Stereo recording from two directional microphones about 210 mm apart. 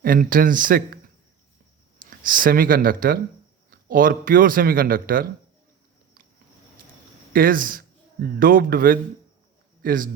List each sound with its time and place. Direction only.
0.0 s speech: 40° right (ahead or behind)
2.0 s a man's voice: 40° right (ahead or behind)
7.3 s a man's voice: 40° right (ahead or behind)